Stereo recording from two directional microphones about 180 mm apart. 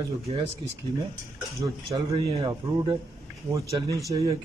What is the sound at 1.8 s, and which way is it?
Speech, 30° right (ahead or behind).